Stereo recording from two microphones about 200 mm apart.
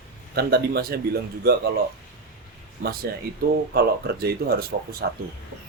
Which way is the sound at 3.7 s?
50° right (ahead or behind).